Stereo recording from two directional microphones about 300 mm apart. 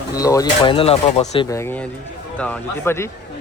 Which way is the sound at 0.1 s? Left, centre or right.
Centre.